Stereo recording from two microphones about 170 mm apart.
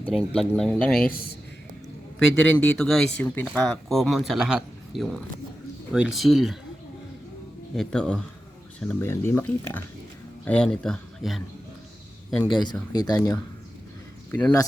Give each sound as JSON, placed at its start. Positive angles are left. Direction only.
{"t": 0.0, "sound": "speech", "side_deg": -5}
{"t": 1.1, "sound": "a man's voice", "side_deg": 60}
{"t": 2.1, "sound": "speech", "side_deg": 5}
{"t": 7.8, "sound": "speech", "side_deg": 5}
{"t": 12.9, "sound": "speech", "side_deg": 20}